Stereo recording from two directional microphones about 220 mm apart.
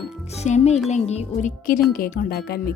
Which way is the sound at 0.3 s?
30° left (ahead or behind).